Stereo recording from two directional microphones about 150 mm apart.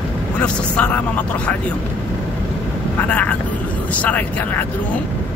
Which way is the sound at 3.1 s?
10° left (ahead or behind).